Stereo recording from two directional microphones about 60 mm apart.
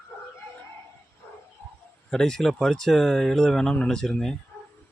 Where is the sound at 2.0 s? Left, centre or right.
Centre.